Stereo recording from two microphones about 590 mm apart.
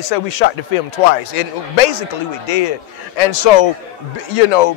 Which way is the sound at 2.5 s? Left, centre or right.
Left.